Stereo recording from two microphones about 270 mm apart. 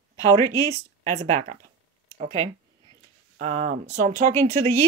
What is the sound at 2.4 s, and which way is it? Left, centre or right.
Speech, centre.